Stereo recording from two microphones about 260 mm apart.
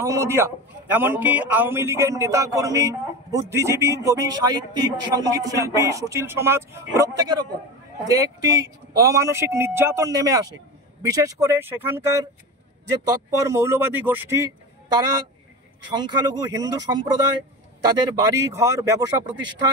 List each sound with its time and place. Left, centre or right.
0.0 s a man's voice: centre
13.3 s a man's voice: centre
15.8 s a man's voice: centre